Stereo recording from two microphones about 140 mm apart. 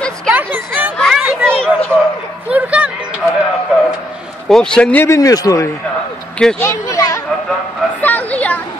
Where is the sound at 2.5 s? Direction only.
10° right (ahead or behind).